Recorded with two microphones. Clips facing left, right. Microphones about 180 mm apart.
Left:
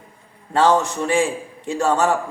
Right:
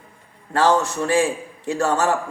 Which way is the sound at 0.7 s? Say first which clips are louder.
Even; 15° left (ahead or behind).